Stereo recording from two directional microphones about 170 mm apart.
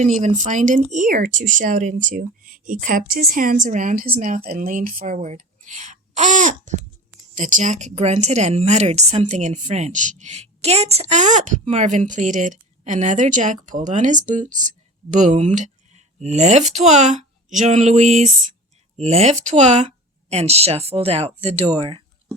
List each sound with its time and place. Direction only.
0.0 s a woman's voice: 45° right (ahead or behind); by 22.0 s 30° right (ahead or behind)